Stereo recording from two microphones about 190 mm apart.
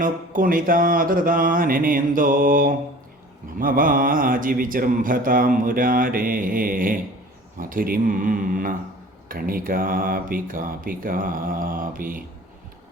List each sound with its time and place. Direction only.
0.0 s speech: 45° right (ahead or behind)